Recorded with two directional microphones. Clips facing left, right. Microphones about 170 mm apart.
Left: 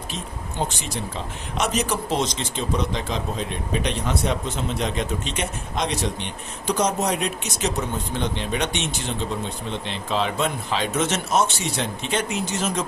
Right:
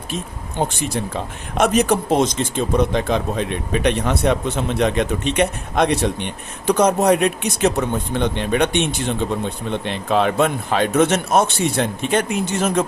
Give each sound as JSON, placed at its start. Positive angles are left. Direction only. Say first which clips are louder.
{"t": 0.1, "sound": "speech", "louder": "right 8 dB", "side_deg": -55}